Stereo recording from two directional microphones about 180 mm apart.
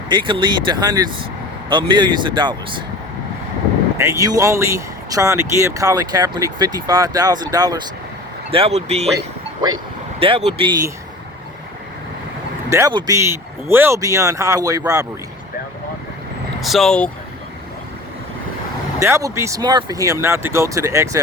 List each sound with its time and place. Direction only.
0.1 s speech: 25° right (ahead or behind)
3.9 s speech: 15° right (ahead or behind)
8.4 s speech: 30° right (ahead or behind)
12.7 s speech: 20° right (ahead or behind)
16.6 s speech: centre (ahead or behind)
18.9 s speech: 15° right (ahead or behind)